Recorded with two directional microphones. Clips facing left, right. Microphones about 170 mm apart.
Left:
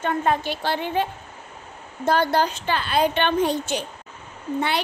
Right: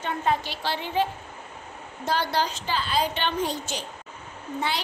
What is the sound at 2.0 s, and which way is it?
A woman's voice, 50° left (ahead or behind).